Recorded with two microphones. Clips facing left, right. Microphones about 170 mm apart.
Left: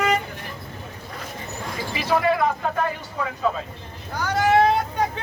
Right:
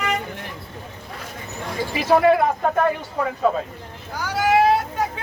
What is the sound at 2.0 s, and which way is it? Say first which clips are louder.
A man's voice: right 5 dB; 45° right (ahead or behind).